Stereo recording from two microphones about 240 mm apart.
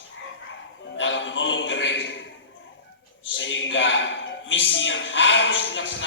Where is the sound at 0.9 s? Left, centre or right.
Left.